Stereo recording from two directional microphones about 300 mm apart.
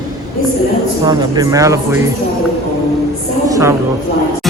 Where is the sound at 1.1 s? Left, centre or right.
Centre.